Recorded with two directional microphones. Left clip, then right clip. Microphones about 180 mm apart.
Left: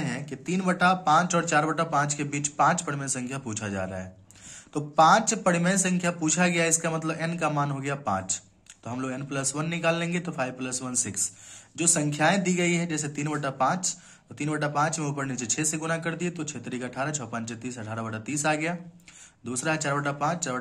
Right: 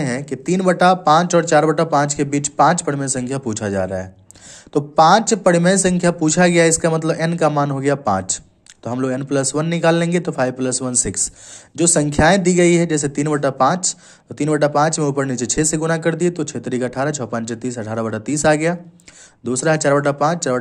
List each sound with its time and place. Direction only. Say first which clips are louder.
0.0 s speech: right 11 dB; 45° right (ahead or behind)